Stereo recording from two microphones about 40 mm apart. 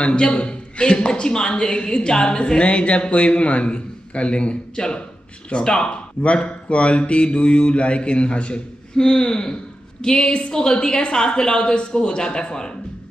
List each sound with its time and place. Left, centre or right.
0.0 s a woman's voice: left
6.2 s a woman's voice: left
8.9 s a woman's voice: centre